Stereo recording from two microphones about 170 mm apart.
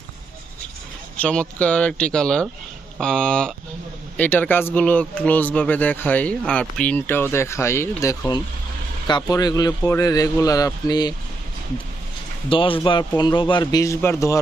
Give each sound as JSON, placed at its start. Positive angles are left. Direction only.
{"t": 1.1, "sound": "a man's voice", "side_deg": 5}
{"t": 12.5, "sound": "a man's voice", "side_deg": 30}